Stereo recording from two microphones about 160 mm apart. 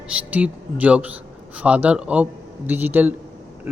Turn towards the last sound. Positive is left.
turn(degrees=-10)  # may be behind; listen again after turning